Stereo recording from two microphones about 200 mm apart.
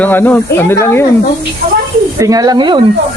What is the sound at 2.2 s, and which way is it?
Speech, 15° right (ahead or behind).